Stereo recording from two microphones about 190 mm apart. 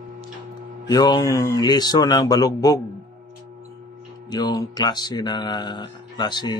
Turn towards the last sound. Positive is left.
turn(degrees=20)  # may be behind; listen again after turning